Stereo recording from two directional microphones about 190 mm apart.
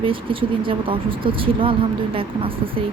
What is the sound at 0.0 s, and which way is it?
Speech, 25° right (ahead or behind).